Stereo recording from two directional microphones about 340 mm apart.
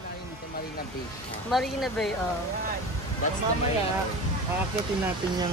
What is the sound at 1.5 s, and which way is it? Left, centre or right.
Speech, centre.